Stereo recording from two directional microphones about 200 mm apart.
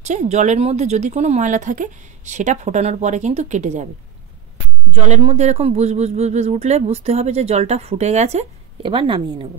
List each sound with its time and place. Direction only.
0.0 s speech: 35° right (ahead or behind)
5.0 s speech: 35° right (ahead or behind)